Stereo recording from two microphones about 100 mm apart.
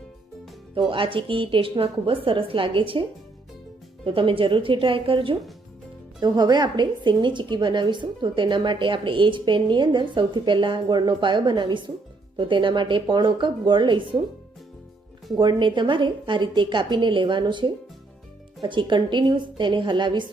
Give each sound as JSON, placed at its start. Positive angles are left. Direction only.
{"t": 0.9, "sound": "a woman's voice", "side_deg": -60}
{"t": 6.2, "sound": "a woman's voice", "side_deg": -45}
{"t": 15.4, "sound": "a woman's voice", "side_deg": -50}